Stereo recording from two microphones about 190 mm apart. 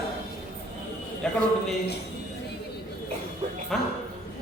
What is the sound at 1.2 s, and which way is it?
Speech, centre (ahead or behind).